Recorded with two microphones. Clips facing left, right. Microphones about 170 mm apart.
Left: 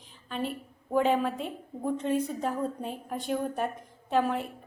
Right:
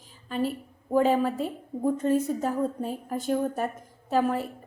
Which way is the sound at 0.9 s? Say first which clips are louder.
Right 3 dB; 5° right (ahead or behind).